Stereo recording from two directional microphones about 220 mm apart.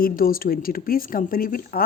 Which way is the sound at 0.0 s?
40° left (ahead or behind).